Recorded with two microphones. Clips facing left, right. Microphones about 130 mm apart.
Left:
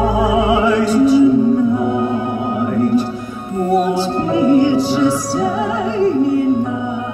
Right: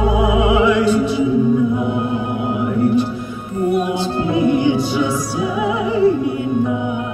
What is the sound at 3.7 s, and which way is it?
Music, 40° left (ahead or behind).